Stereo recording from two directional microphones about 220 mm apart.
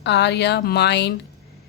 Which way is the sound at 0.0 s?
50° left (ahead or behind).